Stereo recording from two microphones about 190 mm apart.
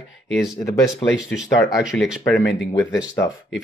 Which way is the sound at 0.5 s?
15° left (ahead or behind).